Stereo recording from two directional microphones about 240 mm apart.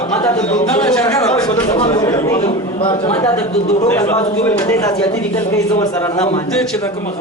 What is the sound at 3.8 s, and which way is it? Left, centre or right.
Speech, centre.